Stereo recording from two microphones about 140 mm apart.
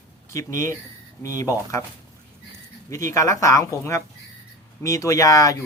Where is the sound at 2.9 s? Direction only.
20° left (ahead or behind).